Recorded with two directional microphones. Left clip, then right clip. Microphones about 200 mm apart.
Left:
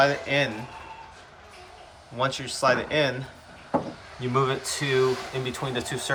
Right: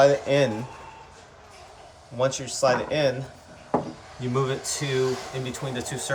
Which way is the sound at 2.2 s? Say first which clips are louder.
Right 2 dB; 10° right (ahead or behind).